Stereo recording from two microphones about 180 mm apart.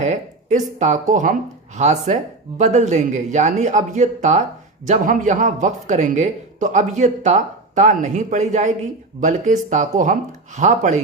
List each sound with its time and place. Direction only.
0.0 s a man's voice: 40° right (ahead or behind)